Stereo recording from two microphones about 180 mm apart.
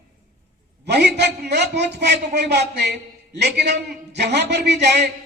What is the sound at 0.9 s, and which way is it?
A woman's voice, 70° right (ahead or behind).